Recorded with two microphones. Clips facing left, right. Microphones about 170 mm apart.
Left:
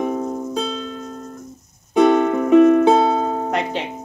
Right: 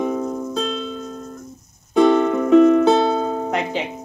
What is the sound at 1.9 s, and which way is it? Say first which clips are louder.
Music: even; 5° left (ahead or behind).